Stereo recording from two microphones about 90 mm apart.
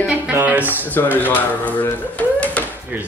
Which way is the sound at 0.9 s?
20° left (ahead or behind).